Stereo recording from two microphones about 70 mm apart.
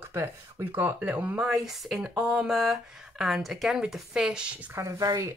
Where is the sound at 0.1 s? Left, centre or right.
Right.